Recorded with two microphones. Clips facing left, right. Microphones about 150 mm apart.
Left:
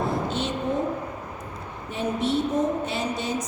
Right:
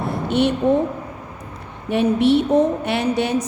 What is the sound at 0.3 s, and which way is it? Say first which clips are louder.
Speech: right 10 dB; 65° right (ahead or behind).